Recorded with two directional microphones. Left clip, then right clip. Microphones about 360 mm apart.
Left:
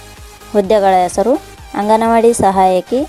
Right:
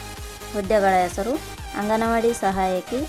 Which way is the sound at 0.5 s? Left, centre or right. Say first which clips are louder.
Left 8 dB; centre.